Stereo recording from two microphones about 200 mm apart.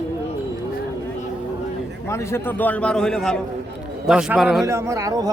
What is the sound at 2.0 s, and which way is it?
A man's voice, 15° left (ahead or behind).